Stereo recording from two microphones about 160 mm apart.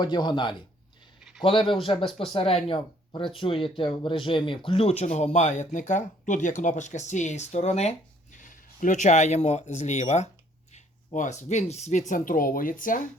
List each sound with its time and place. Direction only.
0.0 s a man's voice: 30° left (ahead or behind); by 13.1 s 55° left (ahead or behind)